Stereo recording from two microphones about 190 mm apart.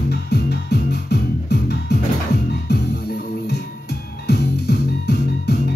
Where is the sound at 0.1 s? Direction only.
55° left (ahead or behind).